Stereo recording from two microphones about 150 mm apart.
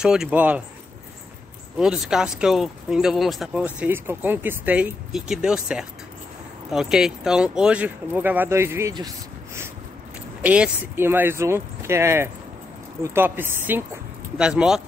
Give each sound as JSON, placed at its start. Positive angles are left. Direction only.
{"t": 0.0, "sound": "speech", "side_deg": -5}
{"t": 1.8, "sound": "speech", "side_deg": -5}
{"t": 10.4, "sound": "speech", "side_deg": -10}